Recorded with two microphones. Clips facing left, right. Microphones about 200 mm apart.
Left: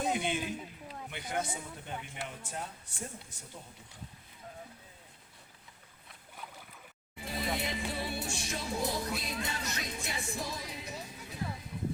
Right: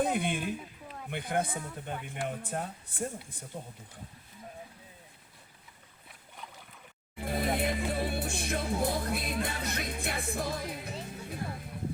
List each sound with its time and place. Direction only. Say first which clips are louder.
0.0 s speech: right 3 dB; 55° right (ahead or behind)
7.2 s music: right 5 dB; 55° right (ahead or behind)